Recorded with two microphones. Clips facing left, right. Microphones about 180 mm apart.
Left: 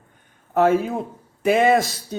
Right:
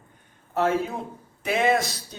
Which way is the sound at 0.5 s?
55° left (ahead or behind).